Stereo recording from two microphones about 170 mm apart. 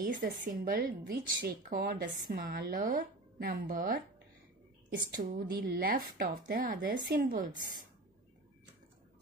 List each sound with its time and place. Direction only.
0.0 s a woman's voice: 55° right (ahead or behind)
5.3 s a woman's voice: 55° right (ahead or behind)